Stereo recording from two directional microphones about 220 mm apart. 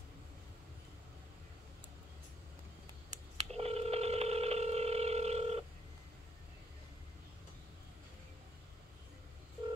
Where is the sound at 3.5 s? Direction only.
30° right (ahead or behind).